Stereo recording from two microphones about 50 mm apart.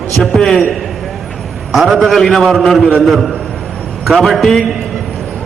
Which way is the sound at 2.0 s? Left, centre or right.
Centre.